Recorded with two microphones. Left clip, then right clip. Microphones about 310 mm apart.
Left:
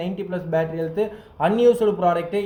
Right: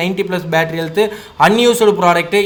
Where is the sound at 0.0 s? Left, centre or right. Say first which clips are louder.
Right 10 dB; right.